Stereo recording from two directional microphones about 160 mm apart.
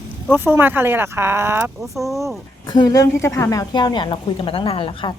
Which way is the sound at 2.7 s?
25° left (ahead or behind).